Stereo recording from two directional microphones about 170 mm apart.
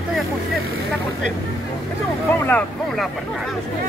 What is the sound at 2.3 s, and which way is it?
Speech, 10° left (ahead or behind).